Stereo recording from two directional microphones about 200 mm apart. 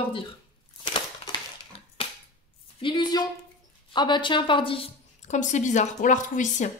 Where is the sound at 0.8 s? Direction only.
20° left (ahead or behind).